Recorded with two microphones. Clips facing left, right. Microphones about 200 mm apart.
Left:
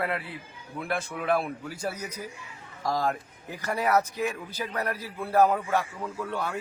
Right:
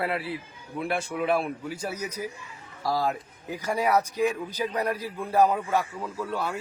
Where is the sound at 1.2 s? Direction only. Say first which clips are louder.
Right 1 dB; 5° right (ahead or behind).